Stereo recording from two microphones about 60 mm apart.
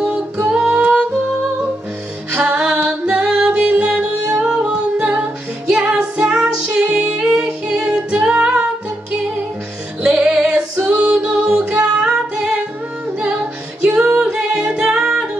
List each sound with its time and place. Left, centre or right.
0.0 s music: centre
2.3 s music: centre
10.0 s female singing: centre
11.5 s music: right
13.9 s music: centre